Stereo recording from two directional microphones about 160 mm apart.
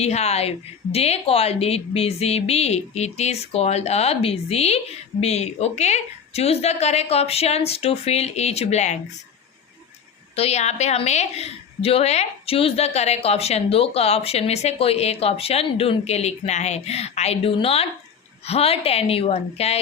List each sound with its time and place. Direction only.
0.0 s a woman's voice: 40° left (ahead or behind)
10.3 s a woman's voice: 40° left (ahead or behind)